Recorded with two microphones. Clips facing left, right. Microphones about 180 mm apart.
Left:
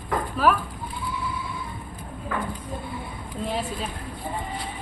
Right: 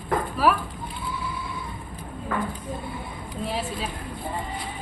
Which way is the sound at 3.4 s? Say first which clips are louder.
Left 1 dB; 5° right (ahead or behind).